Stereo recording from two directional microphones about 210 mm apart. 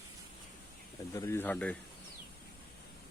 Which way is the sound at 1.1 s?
15° left (ahead or behind).